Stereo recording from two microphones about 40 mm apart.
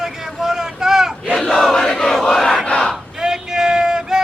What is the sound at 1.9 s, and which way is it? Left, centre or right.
Crowd, centre.